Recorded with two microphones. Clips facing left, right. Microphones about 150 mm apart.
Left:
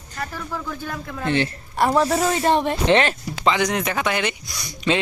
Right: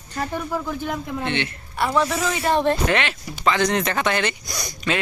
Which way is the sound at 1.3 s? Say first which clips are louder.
Left 4 dB; 35° left (ahead or behind).